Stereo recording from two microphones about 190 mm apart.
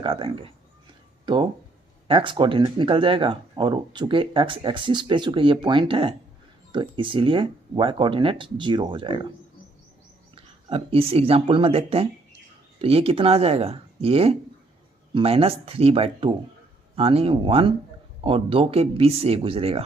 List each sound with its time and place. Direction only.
0.0 s speech: 25° right (ahead or behind)
10.3 s speech: 30° right (ahead or behind)